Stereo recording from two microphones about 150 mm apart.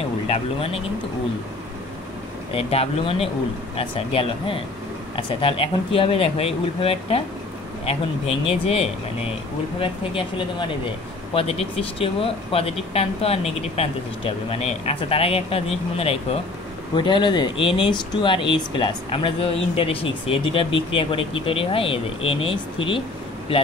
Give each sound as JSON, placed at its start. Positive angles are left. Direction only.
{"t": 0.3, "sound": "speech", "side_deg": 40}
{"t": 2.5, "sound": "speech", "side_deg": 40}
{"t": 8.5, "sound": "speech", "side_deg": 40}